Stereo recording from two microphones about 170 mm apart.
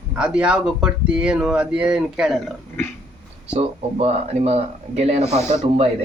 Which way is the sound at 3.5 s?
35° right (ahead or behind).